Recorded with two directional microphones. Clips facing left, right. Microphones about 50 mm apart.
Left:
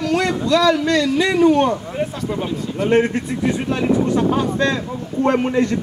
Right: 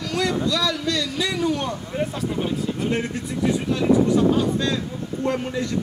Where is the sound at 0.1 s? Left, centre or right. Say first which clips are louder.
Left 4 dB; left.